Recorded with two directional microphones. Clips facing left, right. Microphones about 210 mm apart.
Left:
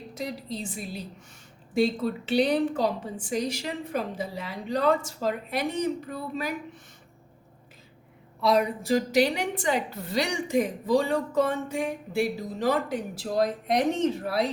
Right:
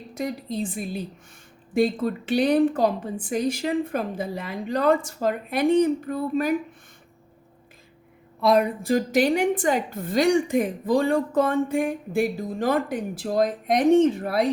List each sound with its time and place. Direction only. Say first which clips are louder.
0.1 s a woman's voice: right 5 dB; 50° right (ahead or behind)
8.4 s a woman's voice: right 3 dB; 50° right (ahead or behind)